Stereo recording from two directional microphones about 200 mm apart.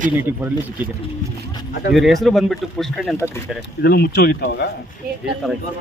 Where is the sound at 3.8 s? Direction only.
50° left (ahead or behind).